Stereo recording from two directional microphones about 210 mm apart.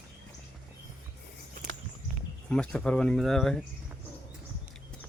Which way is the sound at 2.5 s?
5° left (ahead or behind).